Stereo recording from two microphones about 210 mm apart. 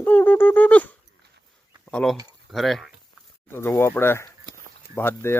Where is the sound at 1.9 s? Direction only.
5° left (ahead or behind).